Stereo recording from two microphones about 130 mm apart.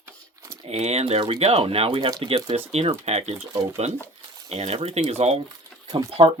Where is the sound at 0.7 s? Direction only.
55° right (ahead or behind).